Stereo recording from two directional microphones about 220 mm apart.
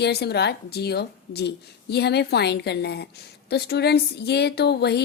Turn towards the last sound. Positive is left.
turn(degrees=50)  # may be behind; listen again after turning